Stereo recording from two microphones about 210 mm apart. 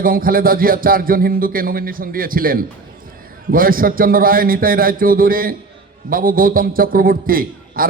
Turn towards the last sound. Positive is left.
turn(degrees=-45)  # may be behind; listen again after turning